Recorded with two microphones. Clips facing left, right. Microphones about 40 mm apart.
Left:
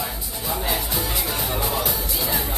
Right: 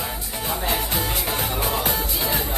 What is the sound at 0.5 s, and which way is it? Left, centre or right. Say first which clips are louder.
Music: right 1 dB; right.